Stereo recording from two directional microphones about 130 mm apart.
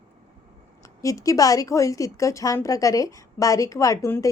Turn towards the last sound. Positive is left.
turn(degrees=20)  # may be behind; listen again after turning